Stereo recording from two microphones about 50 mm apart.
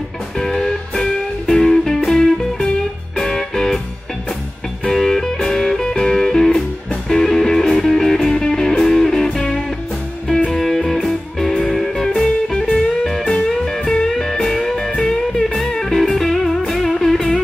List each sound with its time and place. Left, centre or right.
0.4 s music: centre
4.8 s music: centre
10.5 s music: centre
13.8 s music: centre